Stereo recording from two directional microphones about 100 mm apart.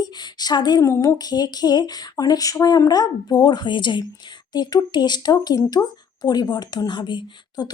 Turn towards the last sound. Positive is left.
turn(degrees=50)  # may be behind; listen again after turning